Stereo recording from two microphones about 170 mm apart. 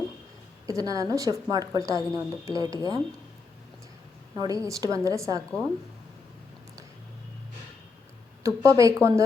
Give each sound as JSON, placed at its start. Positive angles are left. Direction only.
{"t": 0.7, "sound": "a woman's voice", "side_deg": -20}
{"t": 4.4, "sound": "a woman's voice", "side_deg": -20}
{"t": 8.4, "sound": "a woman's voice", "side_deg": -20}